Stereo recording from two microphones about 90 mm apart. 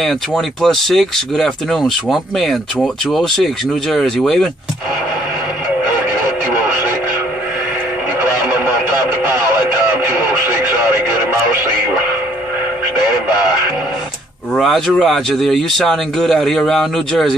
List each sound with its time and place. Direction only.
0.0 s speech: 5° left (ahead or behind)
5.9 s radio: 25° right (ahead or behind)
8.2 s radio: 25° right (ahead or behind)
14.5 s speech: 5° left (ahead or behind)